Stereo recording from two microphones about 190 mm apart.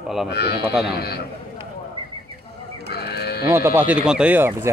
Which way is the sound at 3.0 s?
55° left (ahead or behind).